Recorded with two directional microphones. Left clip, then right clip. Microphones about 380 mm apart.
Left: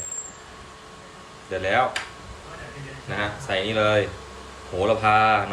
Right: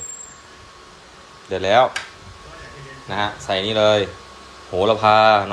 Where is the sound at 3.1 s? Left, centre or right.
Centre.